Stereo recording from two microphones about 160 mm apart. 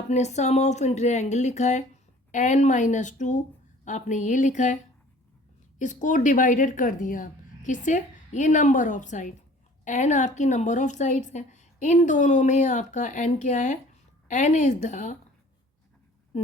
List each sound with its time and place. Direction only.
0.1 s speech: 45° left (ahead or behind)
5.8 s speech: 50° left (ahead or behind)